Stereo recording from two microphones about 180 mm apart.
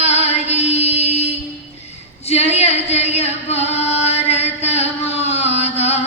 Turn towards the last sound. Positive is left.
turn(degrees=35)  # may be behind; listen again after turning